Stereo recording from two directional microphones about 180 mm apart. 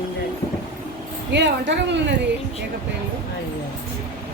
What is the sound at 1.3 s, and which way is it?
Speech, 75° right (ahead or behind).